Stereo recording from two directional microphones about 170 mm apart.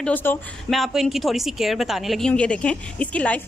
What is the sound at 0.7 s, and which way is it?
A woman's voice, centre (ahead or behind).